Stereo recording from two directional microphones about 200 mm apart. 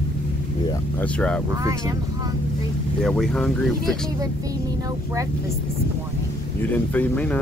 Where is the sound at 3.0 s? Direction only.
Centre (ahead or behind).